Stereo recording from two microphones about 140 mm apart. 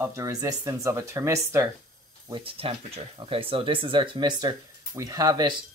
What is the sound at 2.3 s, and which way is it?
Speech, 40° right (ahead or behind).